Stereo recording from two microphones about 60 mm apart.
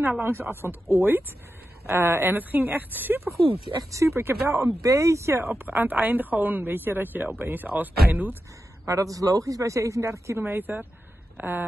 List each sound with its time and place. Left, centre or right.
0.2 s speech: right
1.9 s speech: right
3.9 s speech: right
4.8 s speech: right
5.5 s speech: right
8.8 s speech: right
10.4 s speech: right